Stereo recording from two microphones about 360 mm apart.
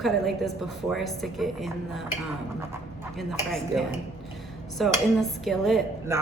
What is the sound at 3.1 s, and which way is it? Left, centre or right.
A woman's voice, centre.